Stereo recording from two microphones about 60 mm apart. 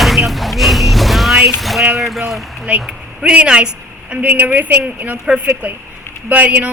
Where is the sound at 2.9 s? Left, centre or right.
Centre.